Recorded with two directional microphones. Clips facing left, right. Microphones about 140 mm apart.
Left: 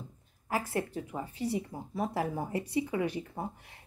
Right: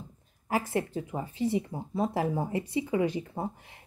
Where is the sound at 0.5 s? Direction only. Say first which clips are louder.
Right 3 dB; 20° right (ahead or behind).